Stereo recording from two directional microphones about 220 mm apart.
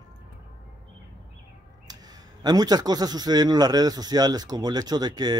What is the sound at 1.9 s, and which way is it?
A man's voice, 15° right (ahead or behind).